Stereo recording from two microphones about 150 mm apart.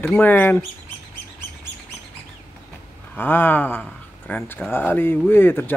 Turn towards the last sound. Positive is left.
turn(degrees=15)  # may be behind; listen again after turning